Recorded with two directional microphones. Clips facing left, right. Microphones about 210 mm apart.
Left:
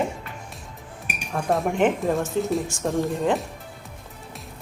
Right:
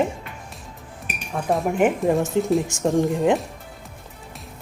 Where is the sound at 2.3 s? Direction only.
20° right (ahead or behind).